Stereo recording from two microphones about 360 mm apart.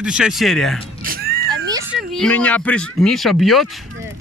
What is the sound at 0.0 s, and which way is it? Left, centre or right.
Speech, centre.